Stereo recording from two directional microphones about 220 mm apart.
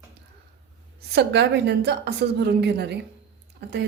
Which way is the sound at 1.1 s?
50° right (ahead or behind).